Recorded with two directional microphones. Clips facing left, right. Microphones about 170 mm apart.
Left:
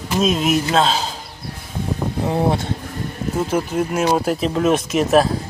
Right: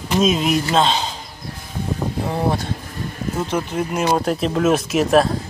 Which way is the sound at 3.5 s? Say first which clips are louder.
Left 2 dB; 5° left (ahead or behind).